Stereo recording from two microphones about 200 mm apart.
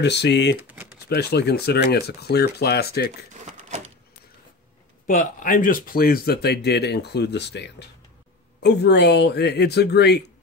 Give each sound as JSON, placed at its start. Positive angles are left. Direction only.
{"t": 0.0, "sound": "speech", "side_deg": 60}
{"t": 3.4, "sound": "a sound", "side_deg": -35}
{"t": 5.0, "sound": "speech", "side_deg": 45}